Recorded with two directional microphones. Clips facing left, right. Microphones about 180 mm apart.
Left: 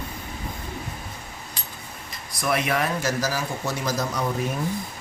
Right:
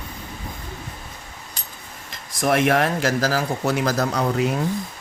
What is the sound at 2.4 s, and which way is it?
Speech, 50° right (ahead or behind).